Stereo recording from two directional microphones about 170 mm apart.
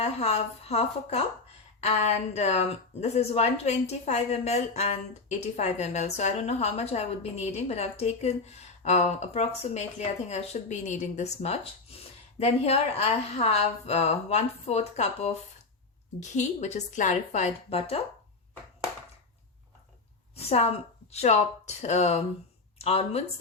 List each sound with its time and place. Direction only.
0.0 s a woman's voice: 40° left (ahead or behind)
20.3 s a woman's voice: 35° left (ahead or behind)